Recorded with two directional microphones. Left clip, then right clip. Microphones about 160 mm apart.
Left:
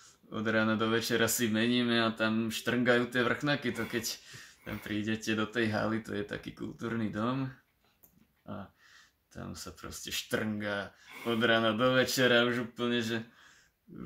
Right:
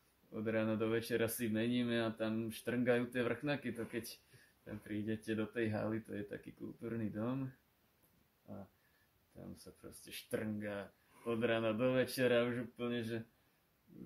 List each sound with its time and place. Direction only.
0.3 s speech: 20° right (ahead or behind)
9.5 s speech: 15° right (ahead or behind)